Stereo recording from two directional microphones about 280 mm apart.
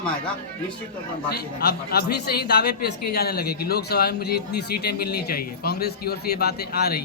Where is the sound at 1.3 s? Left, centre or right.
Left.